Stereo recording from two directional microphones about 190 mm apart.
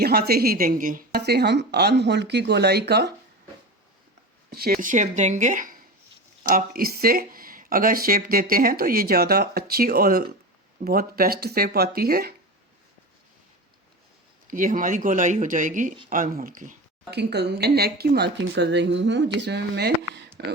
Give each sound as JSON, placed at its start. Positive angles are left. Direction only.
{"t": 0.0, "sound": "speech", "side_deg": -55}
{"t": 4.4, "sound": "speech", "side_deg": -50}
{"t": 14.5, "sound": "speech", "side_deg": -45}
{"t": 17.1, "sound": "speech", "side_deg": -60}